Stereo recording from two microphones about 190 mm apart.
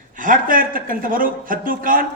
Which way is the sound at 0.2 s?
45° right (ahead or behind).